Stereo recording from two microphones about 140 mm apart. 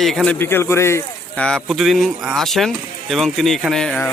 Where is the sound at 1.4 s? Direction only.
5° left (ahead or behind).